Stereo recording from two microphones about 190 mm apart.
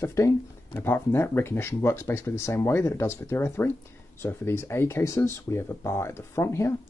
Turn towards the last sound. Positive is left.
turn(degrees=15)  # may be behind; listen again after turning